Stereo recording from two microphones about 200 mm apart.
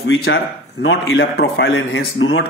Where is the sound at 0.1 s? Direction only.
65° left (ahead or behind).